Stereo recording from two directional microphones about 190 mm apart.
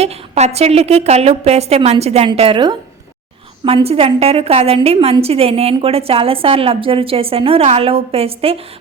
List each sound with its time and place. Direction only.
0.0 s a woman's voice: 35° right (ahead or behind)